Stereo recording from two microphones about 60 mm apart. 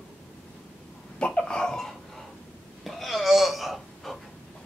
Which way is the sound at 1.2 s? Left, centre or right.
Centre.